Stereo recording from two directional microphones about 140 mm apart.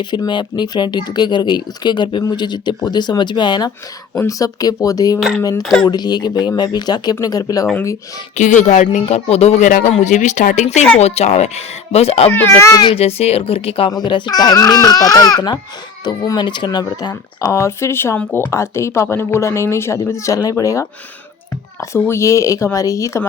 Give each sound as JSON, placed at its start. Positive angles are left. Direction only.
{"t": 0.0, "sound": "speech", "side_deg": 35}
{"t": 8.4, "sound": "speech", "side_deg": 60}
{"t": 9.0, "sound": "speech", "side_deg": 50}
{"t": 9.6, "sound": "speech", "side_deg": 70}
{"t": 9.9, "sound": "speech", "side_deg": 55}
{"t": 12.3, "sound": "speech", "side_deg": 10}
{"t": 12.5, "sound": "speech", "side_deg": 25}